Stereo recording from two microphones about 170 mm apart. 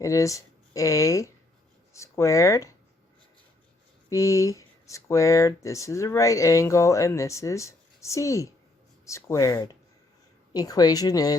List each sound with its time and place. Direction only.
0.0 s speech: 20° left (ahead or behind)
4.1 s a woman's voice: 20° left (ahead or behind)